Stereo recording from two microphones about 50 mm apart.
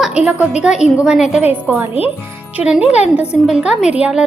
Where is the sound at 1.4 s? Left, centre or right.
Right.